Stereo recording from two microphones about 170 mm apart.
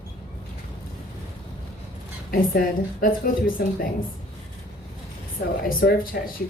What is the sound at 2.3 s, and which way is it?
Speech, 55° left (ahead or behind).